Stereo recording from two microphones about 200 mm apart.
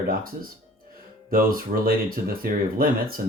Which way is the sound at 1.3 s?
45° right (ahead or behind).